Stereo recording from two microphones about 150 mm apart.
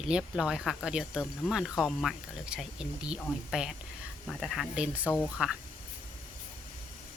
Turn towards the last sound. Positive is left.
turn(degrees=-5)  # may be behind; listen again after turning